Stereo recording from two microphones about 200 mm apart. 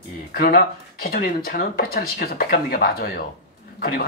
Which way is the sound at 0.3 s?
45° left (ahead or behind).